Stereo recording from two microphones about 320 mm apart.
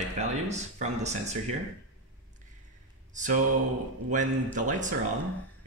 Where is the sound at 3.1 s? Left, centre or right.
Right.